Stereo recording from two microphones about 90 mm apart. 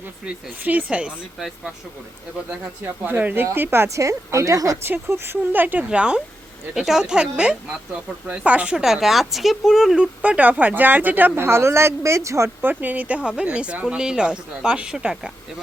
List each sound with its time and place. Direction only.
0.3 s speech: 15° right (ahead or behind)
2.5 s a woman's voice: 20° right (ahead or behind); by 4.8 s 40° right (ahead or behind)
4.9 s speech: 25° right (ahead or behind)
12.8 s speech: 20° right (ahead or behind)